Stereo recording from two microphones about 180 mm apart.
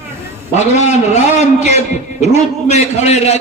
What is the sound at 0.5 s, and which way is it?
A man's voice, 40° left (ahead or behind).